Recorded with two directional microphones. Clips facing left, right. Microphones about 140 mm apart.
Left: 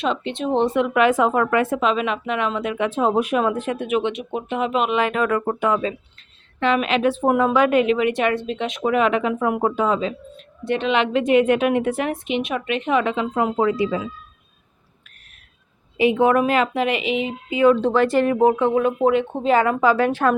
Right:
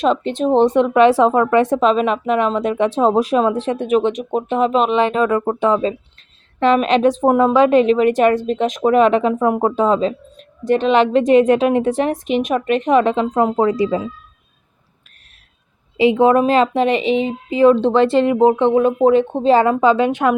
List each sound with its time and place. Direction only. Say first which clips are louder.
0.0 s speech: right 6 dB; 40° right (ahead or behind)
16.0 s a woman's voice: right 4 dB; 30° right (ahead or behind)